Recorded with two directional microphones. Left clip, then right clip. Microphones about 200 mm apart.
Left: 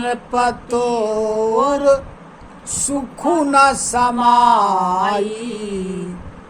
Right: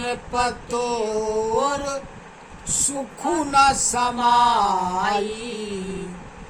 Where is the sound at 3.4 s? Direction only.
20° left (ahead or behind).